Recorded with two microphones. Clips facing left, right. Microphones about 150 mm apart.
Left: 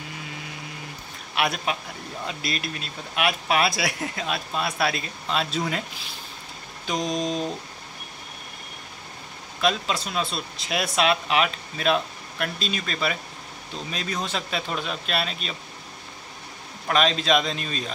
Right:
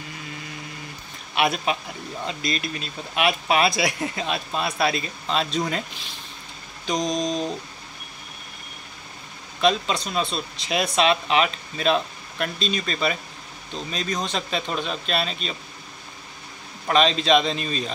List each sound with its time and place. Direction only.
1.3 s speech: centre (ahead or behind)
6.9 s speech: 5° left (ahead or behind)
9.6 s speech: 5° left (ahead or behind)
16.8 s speech: centre (ahead or behind)